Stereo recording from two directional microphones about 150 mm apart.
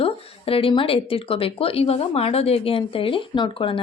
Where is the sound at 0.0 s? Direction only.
40° left (ahead or behind).